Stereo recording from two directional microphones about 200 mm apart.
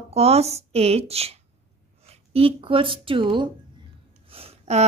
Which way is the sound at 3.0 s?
25° right (ahead or behind).